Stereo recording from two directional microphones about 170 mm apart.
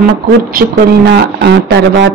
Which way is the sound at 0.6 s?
75° right (ahead or behind).